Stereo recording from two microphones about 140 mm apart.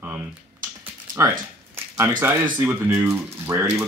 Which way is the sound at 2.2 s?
15° right (ahead or behind).